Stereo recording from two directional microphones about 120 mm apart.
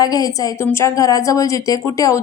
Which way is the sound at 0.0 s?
30° left (ahead or behind).